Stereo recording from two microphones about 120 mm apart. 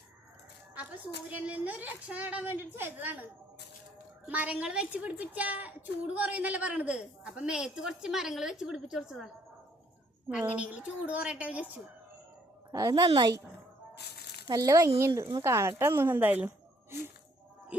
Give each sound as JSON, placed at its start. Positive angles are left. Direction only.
{"t": 1.3, "sound": "a woman's voice", "side_deg": -15}
{"t": 4.3, "sound": "a woman's voice", "side_deg": -10}
{"t": 10.2, "sound": "a woman's voice", "side_deg": -10}
{"t": 12.7, "sound": "a woman's voice", "side_deg": -30}
{"t": 14.4, "sound": "speech", "side_deg": -30}